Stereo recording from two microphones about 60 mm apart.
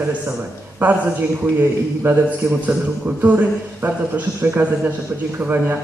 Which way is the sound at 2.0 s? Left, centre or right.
Right.